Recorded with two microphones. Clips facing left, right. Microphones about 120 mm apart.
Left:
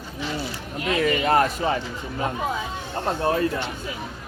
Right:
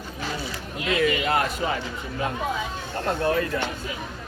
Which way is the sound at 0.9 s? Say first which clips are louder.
Left 2 dB; 35° left (ahead or behind).